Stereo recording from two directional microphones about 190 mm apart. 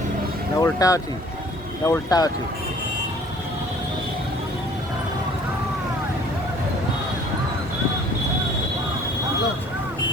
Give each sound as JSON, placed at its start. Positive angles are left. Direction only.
{"t": 0.6, "sound": "speech", "side_deg": 15}